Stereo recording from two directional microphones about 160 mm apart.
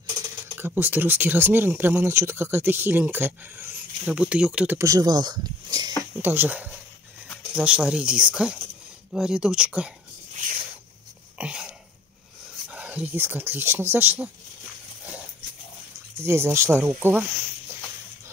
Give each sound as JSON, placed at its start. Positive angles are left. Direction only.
{"t": 0.6, "sound": "speech", "side_deg": -15}
{"t": 4.7, "sound": "speech", "side_deg": -20}
{"t": 6.2, "sound": "speech", "side_deg": -10}
{"t": 11.3, "sound": "a sound", "side_deg": -10}
{"t": 12.6, "sound": "speech", "side_deg": -5}
{"t": 16.3, "sound": "speech", "side_deg": -15}